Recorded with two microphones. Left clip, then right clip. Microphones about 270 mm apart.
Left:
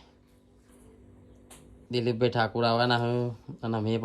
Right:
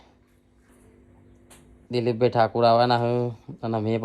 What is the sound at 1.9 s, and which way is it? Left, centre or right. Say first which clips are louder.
Speech: right 5 dB; centre.